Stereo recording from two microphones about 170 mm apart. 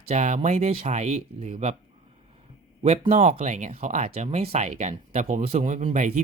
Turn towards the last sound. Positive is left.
turn(degrees=-45)  # may be behind; listen again after turning